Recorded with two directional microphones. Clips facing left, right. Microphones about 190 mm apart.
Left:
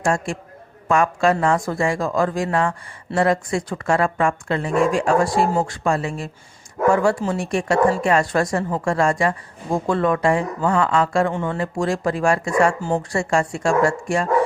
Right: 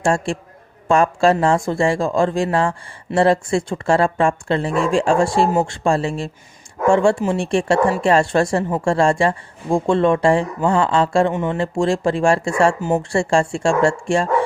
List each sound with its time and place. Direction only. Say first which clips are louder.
0.0 s a man's voice: right 3 dB; 30° right (ahead or behind)